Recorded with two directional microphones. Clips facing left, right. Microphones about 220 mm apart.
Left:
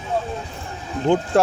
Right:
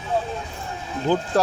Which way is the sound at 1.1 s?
25° left (ahead or behind).